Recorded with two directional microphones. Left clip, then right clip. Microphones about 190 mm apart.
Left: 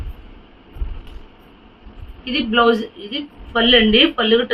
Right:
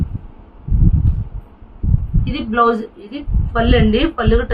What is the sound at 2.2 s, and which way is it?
A woman's voice, 10° right (ahead or behind).